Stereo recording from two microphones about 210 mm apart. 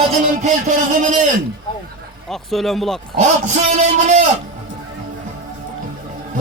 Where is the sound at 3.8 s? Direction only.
35° right (ahead or behind).